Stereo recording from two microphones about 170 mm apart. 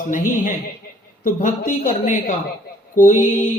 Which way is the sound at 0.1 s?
50° left (ahead or behind).